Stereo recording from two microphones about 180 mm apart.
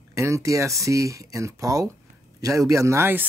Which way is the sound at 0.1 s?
15° right (ahead or behind).